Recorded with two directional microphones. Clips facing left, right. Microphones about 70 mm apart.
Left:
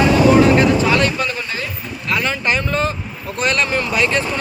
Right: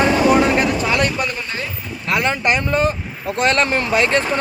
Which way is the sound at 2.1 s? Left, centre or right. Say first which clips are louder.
Right 2 dB; right.